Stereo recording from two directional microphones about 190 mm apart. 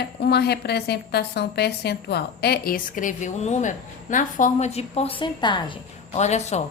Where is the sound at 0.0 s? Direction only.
60° left (ahead or behind).